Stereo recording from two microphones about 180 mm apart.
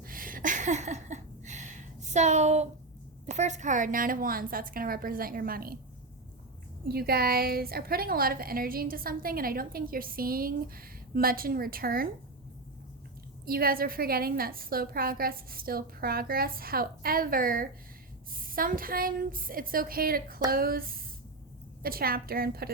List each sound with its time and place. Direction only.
0.0 s a sound: 50° right (ahead or behind)
3.2 s a woman's voice: 40° right (ahead or behind)
6.8 s a woman's voice: 60° right (ahead or behind)
13.4 s a woman's voice: 55° right (ahead or behind)